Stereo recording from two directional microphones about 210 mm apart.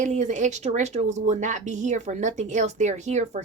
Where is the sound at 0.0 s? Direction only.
35° right (ahead or behind).